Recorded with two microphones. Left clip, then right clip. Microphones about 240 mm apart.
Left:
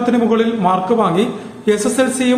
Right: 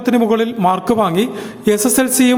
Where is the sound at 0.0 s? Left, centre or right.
Right.